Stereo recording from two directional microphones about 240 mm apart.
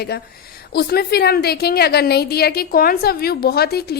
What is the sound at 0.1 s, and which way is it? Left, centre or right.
A woman's voice, left.